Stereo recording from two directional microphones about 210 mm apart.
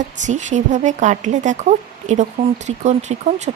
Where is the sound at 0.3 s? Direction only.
35° right (ahead or behind).